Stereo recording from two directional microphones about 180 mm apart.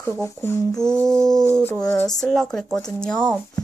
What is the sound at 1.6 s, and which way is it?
Speech, 10° left (ahead or behind).